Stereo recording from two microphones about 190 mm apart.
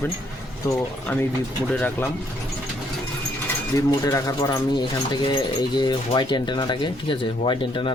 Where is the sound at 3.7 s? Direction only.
15° left (ahead or behind).